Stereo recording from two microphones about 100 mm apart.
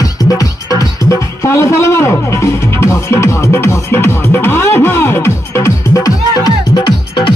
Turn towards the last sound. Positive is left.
turn(degrees=50)  # may be behind; listen again after turning